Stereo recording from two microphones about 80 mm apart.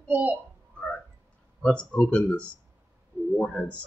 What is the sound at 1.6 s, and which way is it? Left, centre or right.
Speech, centre.